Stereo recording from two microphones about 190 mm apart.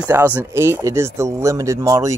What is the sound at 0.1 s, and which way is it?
Speech, 10° right (ahead or behind).